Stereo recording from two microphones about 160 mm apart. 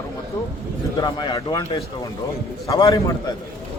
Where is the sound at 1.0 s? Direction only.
25° left (ahead or behind).